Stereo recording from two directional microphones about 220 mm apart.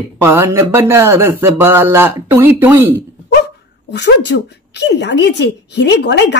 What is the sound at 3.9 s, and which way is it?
A woman's voice, 50° left (ahead or behind).